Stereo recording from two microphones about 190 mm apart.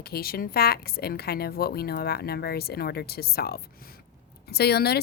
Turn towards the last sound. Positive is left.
turn(degrees=55)  # may be behind; listen again after turning